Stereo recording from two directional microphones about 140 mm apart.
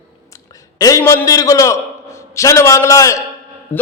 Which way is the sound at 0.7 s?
25° left (ahead or behind).